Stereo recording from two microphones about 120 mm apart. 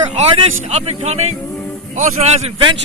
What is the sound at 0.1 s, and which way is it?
Speech, 60° right (ahead or behind).